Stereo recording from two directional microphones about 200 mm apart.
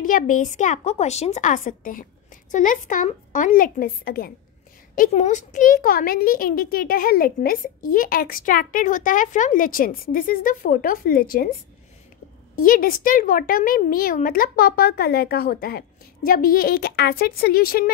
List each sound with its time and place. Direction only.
0.0 s a woman's voice: 40° left (ahead or behind)
12.5 s speech: 45° left (ahead or behind)